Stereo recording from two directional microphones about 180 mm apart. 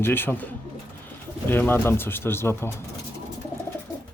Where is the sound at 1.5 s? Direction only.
10° left (ahead or behind).